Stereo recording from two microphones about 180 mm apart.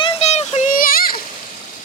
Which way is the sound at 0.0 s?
35° left (ahead or behind).